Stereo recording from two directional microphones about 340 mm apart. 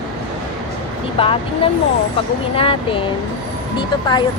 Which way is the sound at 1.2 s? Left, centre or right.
Centre.